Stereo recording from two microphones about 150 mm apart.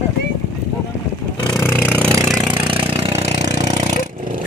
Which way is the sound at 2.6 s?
35° right (ahead or behind).